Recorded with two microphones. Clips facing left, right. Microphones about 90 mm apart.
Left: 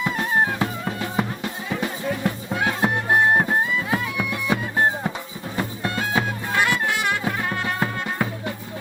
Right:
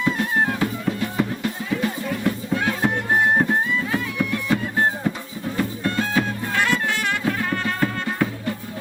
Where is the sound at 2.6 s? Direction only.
15° left (ahead or behind).